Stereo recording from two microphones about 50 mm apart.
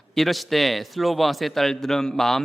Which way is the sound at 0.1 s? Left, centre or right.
Centre.